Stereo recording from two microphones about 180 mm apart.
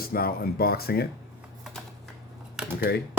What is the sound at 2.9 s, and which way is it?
Speech, 60° left (ahead or behind).